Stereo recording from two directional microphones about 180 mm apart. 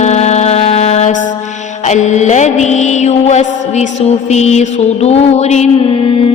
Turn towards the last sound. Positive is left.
turn(degrees=30)  # may be behind; listen again after turning